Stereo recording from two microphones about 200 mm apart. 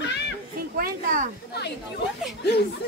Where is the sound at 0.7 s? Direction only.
45° right (ahead or behind).